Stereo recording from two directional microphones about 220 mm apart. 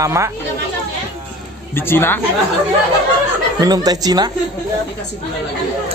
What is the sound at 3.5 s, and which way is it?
Speech, 15° right (ahead or behind).